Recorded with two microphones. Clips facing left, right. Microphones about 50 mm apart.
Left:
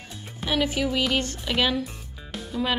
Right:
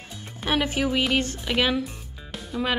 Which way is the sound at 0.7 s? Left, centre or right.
Right.